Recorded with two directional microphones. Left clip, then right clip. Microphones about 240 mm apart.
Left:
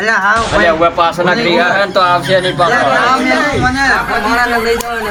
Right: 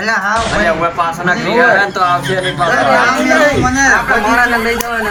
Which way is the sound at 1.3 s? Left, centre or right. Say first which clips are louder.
Right 1 dB; left.